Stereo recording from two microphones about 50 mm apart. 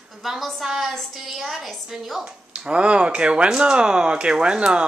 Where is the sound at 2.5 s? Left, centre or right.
Right.